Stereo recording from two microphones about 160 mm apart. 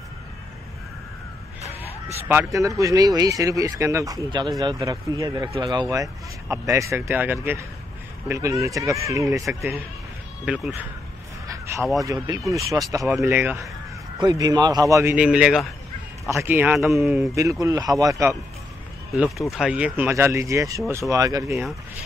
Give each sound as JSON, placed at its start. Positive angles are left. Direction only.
{"t": 2.1, "sound": "speech", "side_deg": -15}
{"t": 10.4, "sound": "speech", "side_deg": -5}
{"t": 11.4, "sound": "a sound", "side_deg": -20}
{"t": 12.0, "sound": "speech", "side_deg": -20}
{"t": 14.2, "sound": "speech", "side_deg": -25}
{"t": 15.1, "sound": "speech", "side_deg": -5}
{"t": 17.2, "sound": "speech", "side_deg": -20}
{"t": 19.1, "sound": "speech", "side_deg": -5}
{"t": 21.5, "sound": "speech", "side_deg": 0}